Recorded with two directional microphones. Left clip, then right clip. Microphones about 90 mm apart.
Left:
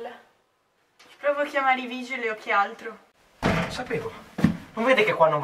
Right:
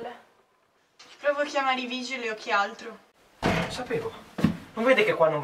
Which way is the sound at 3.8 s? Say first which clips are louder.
Even; centre (ahead or behind).